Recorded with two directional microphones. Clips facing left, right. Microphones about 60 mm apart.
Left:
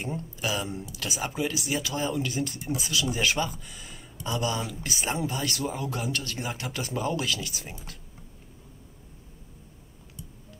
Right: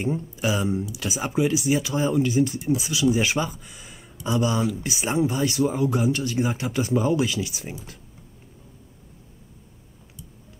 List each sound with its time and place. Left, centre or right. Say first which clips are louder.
0.0 s speech: right 6 dB; centre
3.7 s a sound: even; centre
4.4 s speech: right 7 dB; centre
4.8 s speech: right 6 dB; centre